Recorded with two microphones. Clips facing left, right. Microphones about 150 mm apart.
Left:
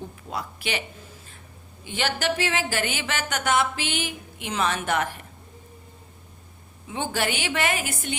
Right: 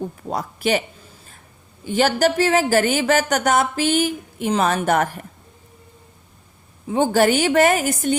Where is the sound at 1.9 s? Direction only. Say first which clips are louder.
Right 9 dB; 40° right (ahead or behind).